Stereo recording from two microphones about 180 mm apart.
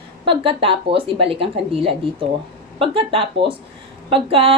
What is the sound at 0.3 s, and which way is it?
A woman's voice, 30° right (ahead or behind).